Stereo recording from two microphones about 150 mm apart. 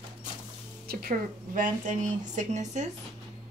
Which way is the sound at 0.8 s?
75° right (ahead or behind).